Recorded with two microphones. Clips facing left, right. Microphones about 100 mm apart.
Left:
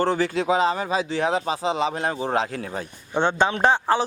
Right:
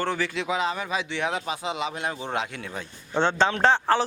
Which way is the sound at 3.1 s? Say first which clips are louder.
Left 1 dB; 15° left (ahead or behind).